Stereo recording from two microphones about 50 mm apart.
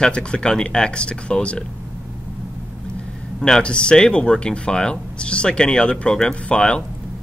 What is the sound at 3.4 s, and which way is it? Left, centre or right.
Speech, centre.